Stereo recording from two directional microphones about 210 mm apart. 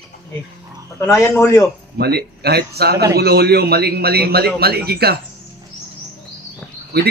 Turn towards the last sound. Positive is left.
turn(degrees=-50)  # may be behind; listen again after turning